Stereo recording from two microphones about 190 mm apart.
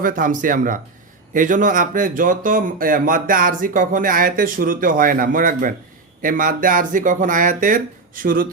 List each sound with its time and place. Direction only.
0.0 s speech: 45° right (ahead or behind)